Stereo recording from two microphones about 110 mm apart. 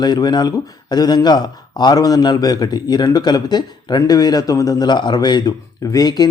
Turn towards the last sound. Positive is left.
turn(degrees=35)  # may be behind; listen again after turning